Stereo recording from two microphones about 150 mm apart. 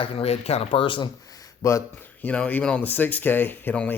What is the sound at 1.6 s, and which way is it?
Speech, 20° left (ahead or behind).